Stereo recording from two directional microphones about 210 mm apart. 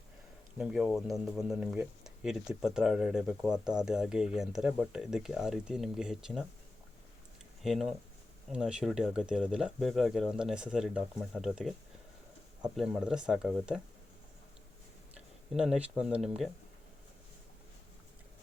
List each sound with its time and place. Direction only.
0.6 s speech: 5° right (ahead or behind)
7.6 s speech: centre (ahead or behind)
12.7 s speech: 5° right (ahead or behind)
15.5 s speech: 5° right (ahead or behind)